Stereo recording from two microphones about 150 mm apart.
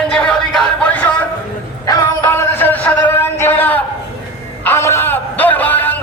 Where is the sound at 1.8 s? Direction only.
25° left (ahead or behind).